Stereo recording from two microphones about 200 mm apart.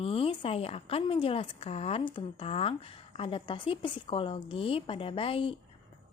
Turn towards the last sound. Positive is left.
turn(degrees=25)  # may be behind; listen again after turning